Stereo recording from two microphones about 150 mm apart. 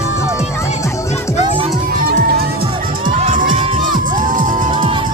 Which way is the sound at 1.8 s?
75° right (ahead or behind).